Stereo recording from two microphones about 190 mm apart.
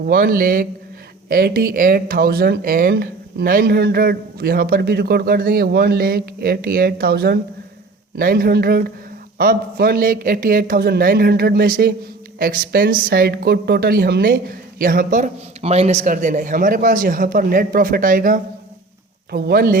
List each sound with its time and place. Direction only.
0.0 s speech: 50° right (ahead or behind)
19.3 s speech: 55° right (ahead or behind)